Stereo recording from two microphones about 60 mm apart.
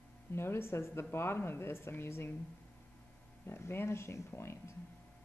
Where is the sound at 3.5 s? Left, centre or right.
Left.